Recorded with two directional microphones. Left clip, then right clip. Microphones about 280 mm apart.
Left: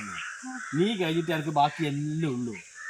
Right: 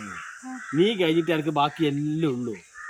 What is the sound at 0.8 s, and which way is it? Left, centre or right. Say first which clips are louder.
Speech: right 6 dB; centre.